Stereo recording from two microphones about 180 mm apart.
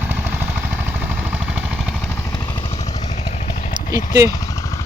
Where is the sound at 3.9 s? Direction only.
20° right (ahead or behind).